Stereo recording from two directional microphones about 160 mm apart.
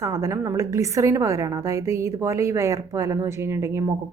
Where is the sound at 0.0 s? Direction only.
20° right (ahead or behind).